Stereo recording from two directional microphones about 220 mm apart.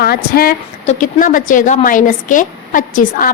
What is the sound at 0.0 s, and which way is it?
A woman's voice, 45° left (ahead or behind).